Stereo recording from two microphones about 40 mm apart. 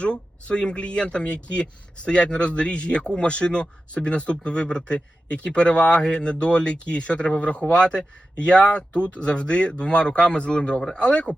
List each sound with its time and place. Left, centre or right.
0.0 s a man's voice: left